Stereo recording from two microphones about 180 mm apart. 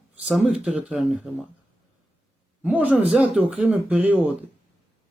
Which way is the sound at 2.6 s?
10° right (ahead or behind).